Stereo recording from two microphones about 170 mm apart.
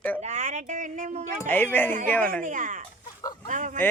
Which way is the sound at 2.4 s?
50° right (ahead or behind).